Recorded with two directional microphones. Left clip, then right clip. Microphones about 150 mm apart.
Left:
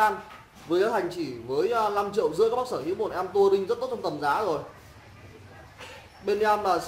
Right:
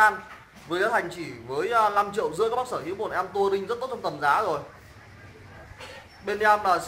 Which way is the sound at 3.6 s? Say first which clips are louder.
Left 1 dB; 20° right (ahead or behind).